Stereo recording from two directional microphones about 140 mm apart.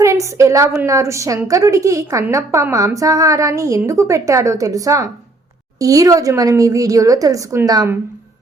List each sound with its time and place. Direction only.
0.0 s a woman's voice: 20° right (ahead or behind)